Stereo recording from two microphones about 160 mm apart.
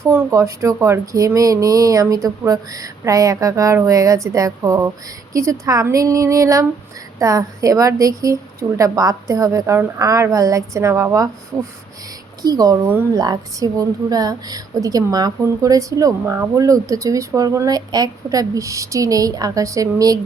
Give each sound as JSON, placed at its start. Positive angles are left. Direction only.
{"t": 0.0, "sound": "a woman's voice", "side_deg": -15}
{"t": 12.4, "sound": "a woman's voice", "side_deg": -25}